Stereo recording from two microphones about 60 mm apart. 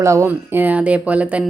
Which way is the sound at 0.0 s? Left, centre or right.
Right.